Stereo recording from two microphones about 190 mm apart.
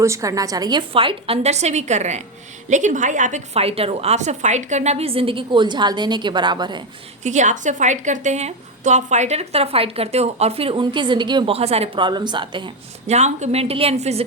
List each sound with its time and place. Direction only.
0.0 s a woman's voice: 15° right (ahead or behind)
7.3 s a woman's voice: 40° right (ahead or behind)